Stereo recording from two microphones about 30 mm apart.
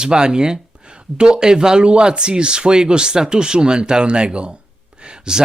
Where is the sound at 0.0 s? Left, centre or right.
Right.